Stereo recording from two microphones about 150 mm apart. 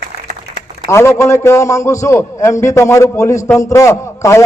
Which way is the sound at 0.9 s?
20° left (ahead or behind).